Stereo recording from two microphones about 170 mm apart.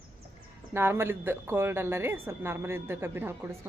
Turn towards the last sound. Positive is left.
turn(degrees=-15)  # may be behind; listen again after turning